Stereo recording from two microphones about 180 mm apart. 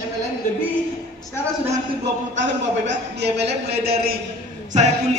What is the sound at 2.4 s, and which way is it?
A woman's voice, 75° right (ahead or behind).